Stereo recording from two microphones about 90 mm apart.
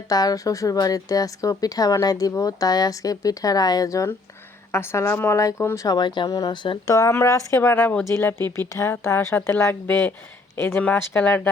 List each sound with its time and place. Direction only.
0.1 s a woman's voice: 45° left (ahead or behind)
6.8 s a woman's voice: 40° left (ahead or behind); by 11.5 s 20° left (ahead or behind)